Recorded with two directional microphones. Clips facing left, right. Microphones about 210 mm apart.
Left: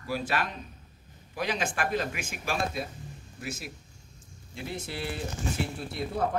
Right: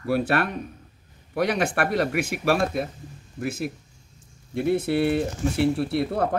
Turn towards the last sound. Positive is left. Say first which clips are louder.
# right 9 dB
turn(degrees=-65)  # may be behind; listen again after turning